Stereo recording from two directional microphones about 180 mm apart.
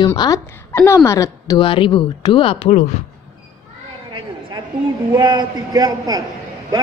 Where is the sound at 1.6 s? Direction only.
30° left (ahead or behind).